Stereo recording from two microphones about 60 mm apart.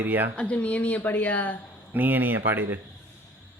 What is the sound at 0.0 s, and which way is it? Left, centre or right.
Speech, right.